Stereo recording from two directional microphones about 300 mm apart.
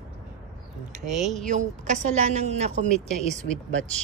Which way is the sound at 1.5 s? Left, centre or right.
Right.